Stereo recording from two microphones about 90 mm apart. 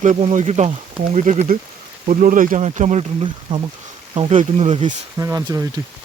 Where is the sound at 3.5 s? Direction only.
60° right (ahead or behind).